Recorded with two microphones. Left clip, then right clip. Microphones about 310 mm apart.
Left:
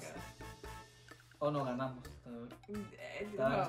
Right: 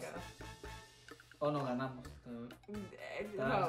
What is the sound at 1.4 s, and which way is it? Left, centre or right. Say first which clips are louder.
Speech: even; centre.